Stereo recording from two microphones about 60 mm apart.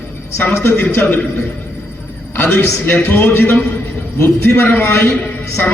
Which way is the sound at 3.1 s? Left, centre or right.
Left.